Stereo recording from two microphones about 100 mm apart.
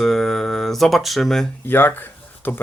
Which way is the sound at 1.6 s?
20° left (ahead or behind).